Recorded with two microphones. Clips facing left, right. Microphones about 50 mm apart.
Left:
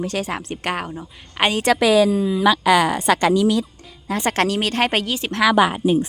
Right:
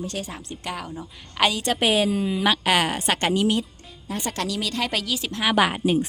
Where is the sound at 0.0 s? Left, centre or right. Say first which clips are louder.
Left 7 dB; left.